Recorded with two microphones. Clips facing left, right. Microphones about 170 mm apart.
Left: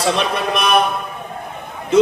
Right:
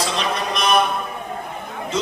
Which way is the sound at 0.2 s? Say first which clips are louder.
Left 4 dB; 60° left (ahead or behind).